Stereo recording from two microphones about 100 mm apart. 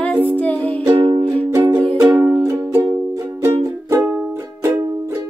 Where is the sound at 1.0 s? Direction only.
70° right (ahead or behind).